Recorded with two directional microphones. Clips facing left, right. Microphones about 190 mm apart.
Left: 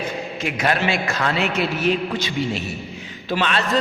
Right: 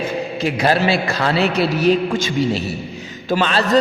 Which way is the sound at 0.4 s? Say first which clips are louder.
Right 5 dB; 35° right (ahead or behind).